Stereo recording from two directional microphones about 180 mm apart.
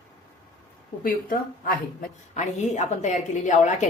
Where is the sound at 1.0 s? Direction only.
50° left (ahead or behind).